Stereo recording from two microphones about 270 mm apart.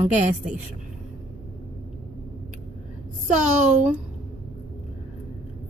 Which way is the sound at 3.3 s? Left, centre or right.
Right.